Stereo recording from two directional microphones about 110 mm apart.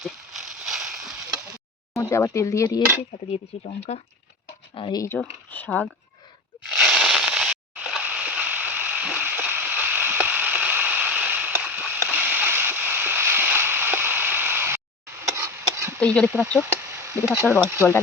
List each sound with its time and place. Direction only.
0.0 s a sound: centre (ahead or behind)
1.9 s speech: 25° left (ahead or behind)
3.3 s speech: 75° left (ahead or behind)
4.7 s speech: 55° left (ahead or behind)
5.0 s speech: 15° left (ahead or behind)
6.7 s a sound: 5° right (ahead or behind)
15.2 s chop: 25° right (ahead or behind)
16.0 s speech: 10° left (ahead or behind)
16.7 s a sound: 20° right (ahead or behind)
17.3 s speech: 20° right (ahead or behind)